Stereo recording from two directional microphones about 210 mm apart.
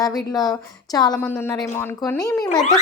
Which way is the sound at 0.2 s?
20° left (ahead or behind).